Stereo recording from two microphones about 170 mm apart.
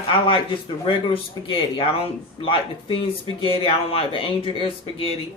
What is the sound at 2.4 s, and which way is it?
Speech, 30° left (ahead or behind).